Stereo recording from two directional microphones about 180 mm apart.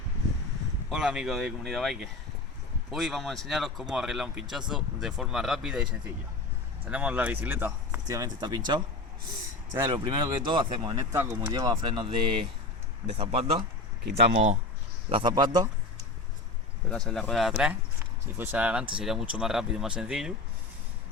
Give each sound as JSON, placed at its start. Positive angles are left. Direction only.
{"t": 0.9, "sound": "speech", "side_deg": -5}
{"t": 9.9, "sound": "speech", "side_deg": -25}
{"t": 15.1, "sound": "speech", "side_deg": -25}
{"t": 16.9, "sound": "speech", "side_deg": 5}